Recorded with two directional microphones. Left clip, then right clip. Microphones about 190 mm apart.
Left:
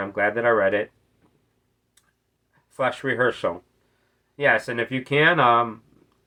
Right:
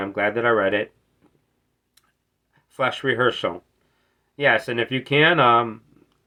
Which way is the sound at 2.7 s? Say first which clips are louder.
Right 1 dB; 15° right (ahead or behind).